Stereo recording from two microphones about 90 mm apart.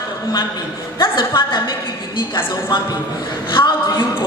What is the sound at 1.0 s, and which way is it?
A woman's voice, 65° left (ahead or behind).